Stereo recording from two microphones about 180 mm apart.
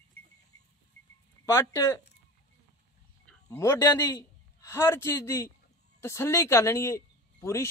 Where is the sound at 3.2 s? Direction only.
10° left (ahead or behind).